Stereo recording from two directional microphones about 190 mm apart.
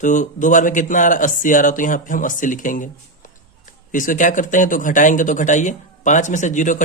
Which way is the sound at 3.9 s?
45° left (ahead or behind).